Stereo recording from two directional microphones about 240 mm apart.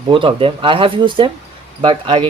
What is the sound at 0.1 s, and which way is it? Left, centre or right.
Speech, right.